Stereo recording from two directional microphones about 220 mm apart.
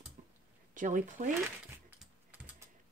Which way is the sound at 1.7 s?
5° right (ahead or behind).